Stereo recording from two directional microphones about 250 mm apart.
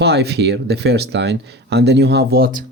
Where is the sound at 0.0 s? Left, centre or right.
Right.